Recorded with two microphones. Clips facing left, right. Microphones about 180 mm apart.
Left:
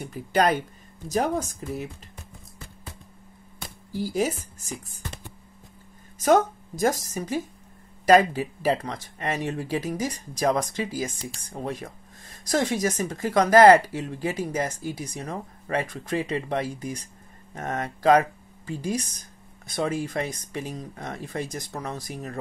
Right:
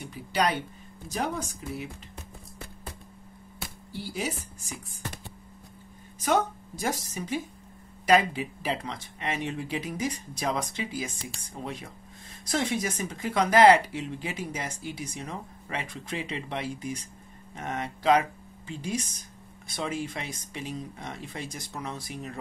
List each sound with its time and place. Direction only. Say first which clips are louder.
0.1 s speech: left 5 dB; 50° left (ahead or behind)
3.9 s speech: left 8 dB; 45° left (ahead or behind)
6.1 s speech: left 6 dB; 45° left (ahead or behind)